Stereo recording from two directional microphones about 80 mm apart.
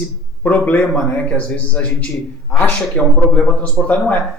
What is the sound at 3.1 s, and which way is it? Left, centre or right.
A man's voice, centre.